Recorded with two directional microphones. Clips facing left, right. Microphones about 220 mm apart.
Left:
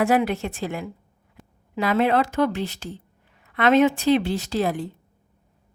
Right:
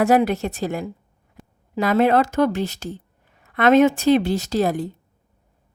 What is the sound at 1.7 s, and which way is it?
A woman's voice, 45° right (ahead or behind).